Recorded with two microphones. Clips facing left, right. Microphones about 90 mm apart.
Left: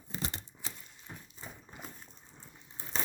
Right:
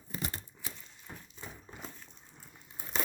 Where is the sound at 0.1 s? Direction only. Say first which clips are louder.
Even; 25° left (ahead or behind).